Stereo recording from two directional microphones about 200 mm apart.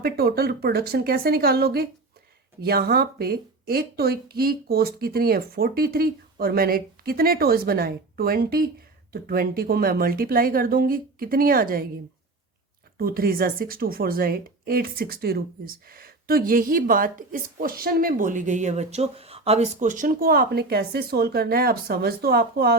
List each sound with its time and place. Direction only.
0.0 s a woman's voice: 50° right (ahead or behind)
13.0 s a woman's voice: 45° right (ahead or behind)